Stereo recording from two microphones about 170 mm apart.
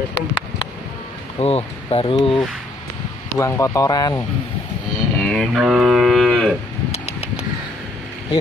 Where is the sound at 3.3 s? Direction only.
20° left (ahead or behind).